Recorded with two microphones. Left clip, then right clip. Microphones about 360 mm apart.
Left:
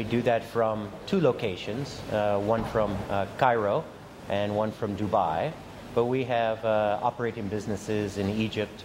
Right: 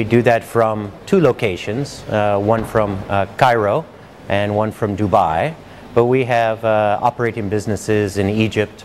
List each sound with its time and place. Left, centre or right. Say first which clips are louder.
0.0 s speech: right 11 dB; right